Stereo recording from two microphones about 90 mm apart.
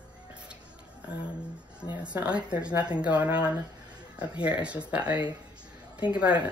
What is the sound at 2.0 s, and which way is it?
Speech, 15° right (ahead or behind).